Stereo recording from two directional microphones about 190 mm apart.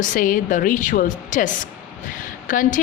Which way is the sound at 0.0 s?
45° left (ahead or behind).